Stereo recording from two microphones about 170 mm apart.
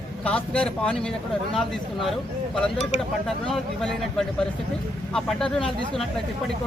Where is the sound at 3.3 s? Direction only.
Centre (ahead or behind).